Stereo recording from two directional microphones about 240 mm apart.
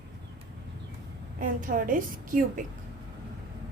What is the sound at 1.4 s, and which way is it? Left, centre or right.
A woman's voice, right.